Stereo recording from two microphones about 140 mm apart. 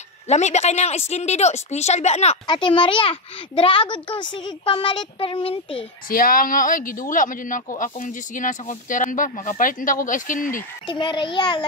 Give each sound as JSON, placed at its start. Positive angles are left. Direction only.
{"t": 0.3, "sound": "a woman's voice", "side_deg": 55}
{"t": 2.4, "sound": "a child's voice", "side_deg": 35}
{"t": 6.0, "sound": "speech", "side_deg": 90}
{"t": 10.9, "sound": "a child's voice", "side_deg": 35}